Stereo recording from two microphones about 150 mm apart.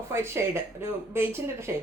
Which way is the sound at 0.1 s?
15° right (ahead or behind).